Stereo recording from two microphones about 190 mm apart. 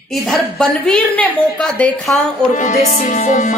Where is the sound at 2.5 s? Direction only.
35° left (ahead or behind).